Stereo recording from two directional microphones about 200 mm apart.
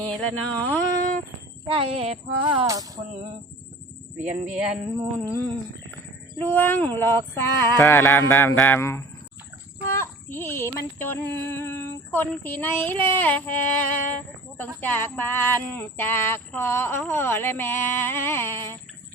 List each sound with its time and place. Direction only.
0.0 s speech: 5° left (ahead or behind)
1.6 s speech: 25° right (ahead or behind)
4.4 s a sound: 5° right (ahead or behind)
6.4 s speech: 10° left (ahead or behind)